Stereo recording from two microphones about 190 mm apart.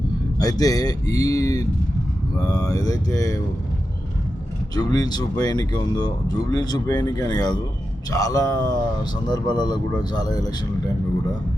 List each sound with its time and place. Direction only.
0.3 s speech: 20° left (ahead or behind)
4.7 s speech: 20° left (ahead or behind)